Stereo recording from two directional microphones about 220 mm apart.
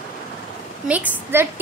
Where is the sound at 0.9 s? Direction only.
5° right (ahead or behind).